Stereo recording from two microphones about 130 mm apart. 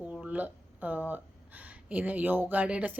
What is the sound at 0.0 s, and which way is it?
A woman's voice, 10° right (ahead or behind).